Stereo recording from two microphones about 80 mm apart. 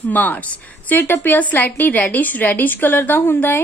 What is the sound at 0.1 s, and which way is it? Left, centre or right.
A woman's voice, left.